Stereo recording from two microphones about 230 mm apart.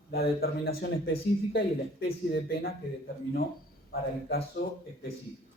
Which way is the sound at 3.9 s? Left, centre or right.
Left.